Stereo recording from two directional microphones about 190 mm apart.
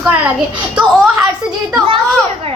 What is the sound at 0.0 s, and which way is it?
A woman's voice, 5° right (ahead or behind).